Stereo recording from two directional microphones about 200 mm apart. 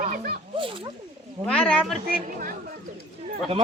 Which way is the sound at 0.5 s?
25° right (ahead or behind).